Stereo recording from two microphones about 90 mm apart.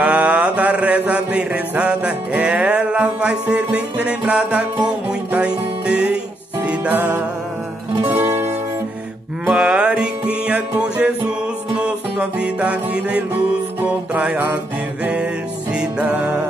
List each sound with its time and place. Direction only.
0.0 s mantra: 15° right (ahead or behind)
5.3 s music: 10° right (ahead or behind)
9.5 s music: 10° right (ahead or behind)
15.7 s music: 15° right (ahead or behind)